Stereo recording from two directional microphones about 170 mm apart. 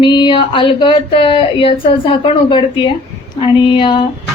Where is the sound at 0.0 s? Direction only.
30° left (ahead or behind).